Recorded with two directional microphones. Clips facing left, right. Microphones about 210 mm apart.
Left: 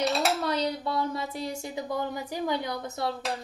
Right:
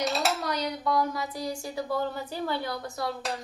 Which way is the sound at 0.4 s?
30° left (ahead or behind).